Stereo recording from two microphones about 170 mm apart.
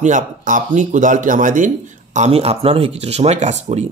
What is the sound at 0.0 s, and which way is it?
A man's voice, 50° right (ahead or behind).